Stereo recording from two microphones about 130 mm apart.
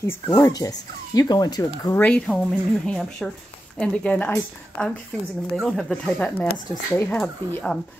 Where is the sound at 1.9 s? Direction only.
10° left (ahead or behind).